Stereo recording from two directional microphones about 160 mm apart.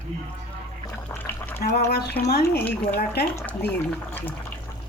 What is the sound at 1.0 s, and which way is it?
Liquid, 10° left (ahead or behind).